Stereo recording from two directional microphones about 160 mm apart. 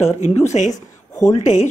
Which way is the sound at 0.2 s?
45° left (ahead or behind).